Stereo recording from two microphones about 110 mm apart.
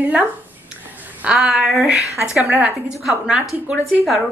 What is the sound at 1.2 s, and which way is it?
A woman's voice, 5° right (ahead or behind).